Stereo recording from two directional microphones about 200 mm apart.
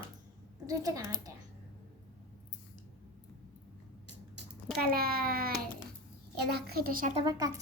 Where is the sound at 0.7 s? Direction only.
15° right (ahead or behind).